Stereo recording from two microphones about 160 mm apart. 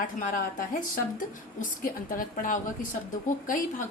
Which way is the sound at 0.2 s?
55° left (ahead or behind).